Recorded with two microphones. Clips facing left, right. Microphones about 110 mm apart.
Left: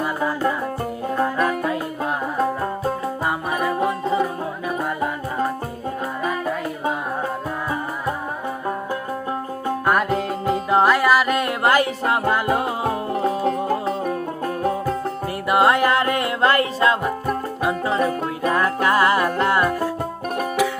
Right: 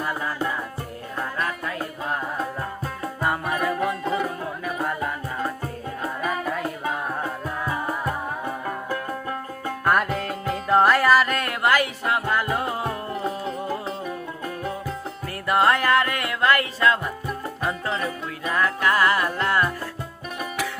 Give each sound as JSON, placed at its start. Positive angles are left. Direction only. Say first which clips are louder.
{"t": 3.5, "sound": "music", "louder": "left 3 dB", "side_deg": 15}
{"t": 9.8, "sound": "music", "louder": "left 1 dB", "side_deg": 5}
{"t": 11.6, "sound": "music", "louder": "left 2 dB", "side_deg": 30}
{"t": 13.7, "sound": "music", "louder": "left 7 dB", "side_deg": 50}
{"t": 15.4, "sound": "music", "louder": "left 3 dB", "side_deg": 15}
{"t": 17.6, "sound": "music", "louder": "left 3 dB", "side_deg": 10}
{"t": 17.9, "sound": "music", "louder": "left 7 dB", "side_deg": 45}
{"t": 18.5, "sound": "music", "louder": "left 2 dB", "side_deg": 25}